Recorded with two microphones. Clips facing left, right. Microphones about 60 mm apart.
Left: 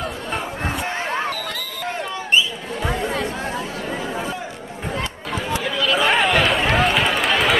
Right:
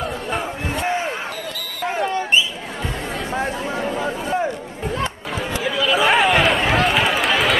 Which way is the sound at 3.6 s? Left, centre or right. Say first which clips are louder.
Right 4 dB; right.